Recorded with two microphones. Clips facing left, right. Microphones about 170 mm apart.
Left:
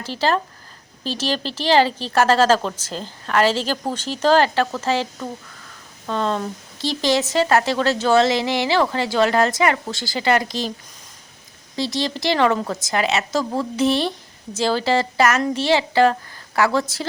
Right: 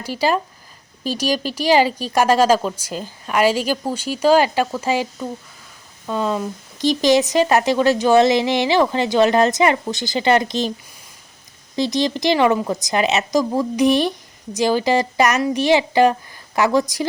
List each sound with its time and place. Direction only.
0.0 s speech: 10° right (ahead or behind)
11.8 s speech: 20° right (ahead or behind)